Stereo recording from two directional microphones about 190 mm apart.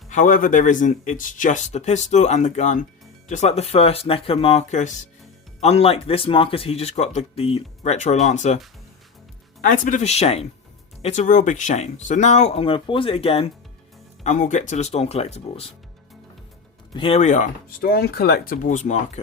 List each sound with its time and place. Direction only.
0.1 s speech: 45° left (ahead or behind)
9.6 s speech: 45° left (ahead or behind)
16.9 s speech: 30° left (ahead or behind)